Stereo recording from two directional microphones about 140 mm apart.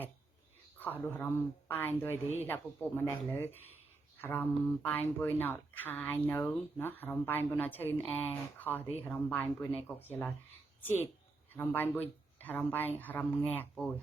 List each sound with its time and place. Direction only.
1.2 s speech: 15° left (ahead or behind)